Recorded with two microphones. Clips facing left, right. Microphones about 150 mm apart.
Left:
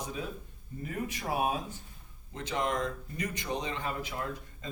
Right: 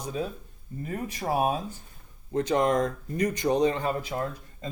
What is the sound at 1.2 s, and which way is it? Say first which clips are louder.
Speech: right 6 dB; 35° right (ahead or behind).